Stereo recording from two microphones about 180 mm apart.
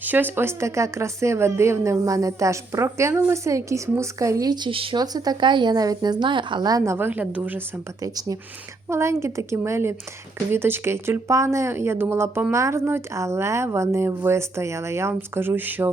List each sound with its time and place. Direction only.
0.0 s speech: 10° right (ahead or behind)
8.0 s speech: 20° right (ahead or behind)